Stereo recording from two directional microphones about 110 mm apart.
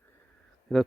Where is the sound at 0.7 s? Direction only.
Centre (ahead or behind).